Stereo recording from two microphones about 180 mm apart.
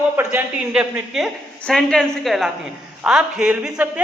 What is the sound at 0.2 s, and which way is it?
A woman's voice, 10° right (ahead or behind).